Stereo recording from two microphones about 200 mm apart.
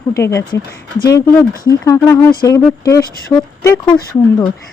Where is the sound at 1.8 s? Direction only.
15° left (ahead or behind).